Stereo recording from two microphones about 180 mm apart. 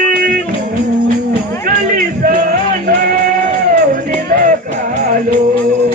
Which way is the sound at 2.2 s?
50° right (ahead or behind).